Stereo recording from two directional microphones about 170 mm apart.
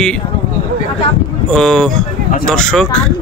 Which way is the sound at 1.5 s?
5° left (ahead or behind).